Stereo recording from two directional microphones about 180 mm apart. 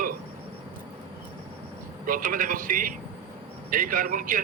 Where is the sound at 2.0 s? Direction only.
50° right (ahead or behind).